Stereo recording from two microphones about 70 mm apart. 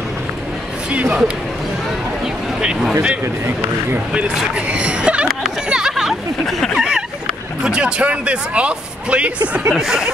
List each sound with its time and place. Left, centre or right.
0.8 s speech: centre
2.2 s a sound: centre
4.1 s speech: centre
5.3 s a sound: centre
6.4 s speech: centre
7.6 s speech: centre
9.7 s speech: centre